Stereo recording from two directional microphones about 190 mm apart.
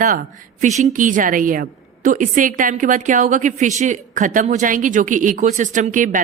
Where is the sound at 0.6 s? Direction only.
40° right (ahead or behind).